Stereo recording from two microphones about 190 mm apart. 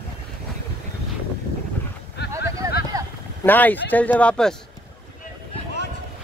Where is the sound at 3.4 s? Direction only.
10° left (ahead or behind).